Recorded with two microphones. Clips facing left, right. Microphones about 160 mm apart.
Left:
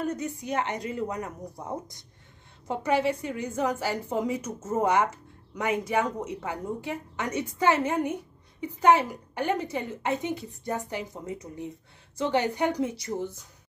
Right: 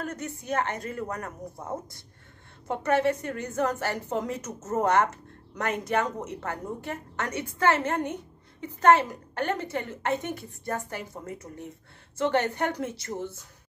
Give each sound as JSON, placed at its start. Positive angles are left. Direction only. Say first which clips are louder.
{"t": 0.0, "sound": "a woman's voice", "louder": "left 4 dB", "side_deg": 15}
{"t": 2.7, "sound": "a woman's voice", "louder": "right 1 dB", "side_deg": 10}